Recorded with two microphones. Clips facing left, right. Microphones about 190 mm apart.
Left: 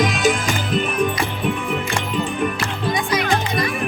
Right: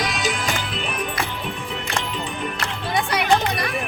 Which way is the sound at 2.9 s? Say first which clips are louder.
Right 2 dB; 65° right (ahead or behind).